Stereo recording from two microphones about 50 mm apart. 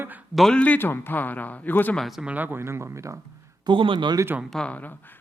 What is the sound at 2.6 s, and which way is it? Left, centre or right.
Speech, right.